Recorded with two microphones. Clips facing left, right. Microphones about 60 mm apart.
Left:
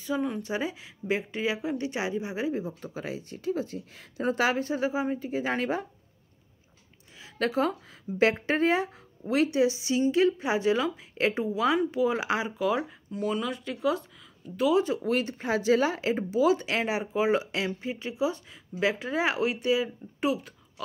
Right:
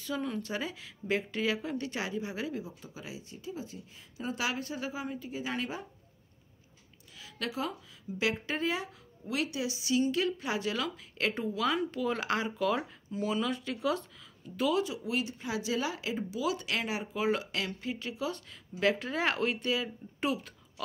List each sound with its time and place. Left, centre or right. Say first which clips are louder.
0.0 s speech: left 5 dB; centre
2.6 s speech: left 9 dB; left
4.5 s a woman's voice: left 8 dB; left
7.2 s a sound: left 9 dB; left
7.4 s speech: left 9 dB; left; by 14.7 s centre
15.0 s speech: left 6 dB; left; by 20.8 s centre